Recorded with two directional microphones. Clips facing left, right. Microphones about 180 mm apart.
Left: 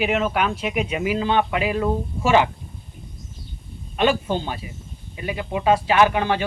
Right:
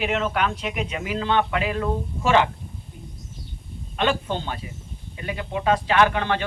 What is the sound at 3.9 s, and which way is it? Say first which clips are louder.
Speech: left 4 dB; 10° left (ahead or behind).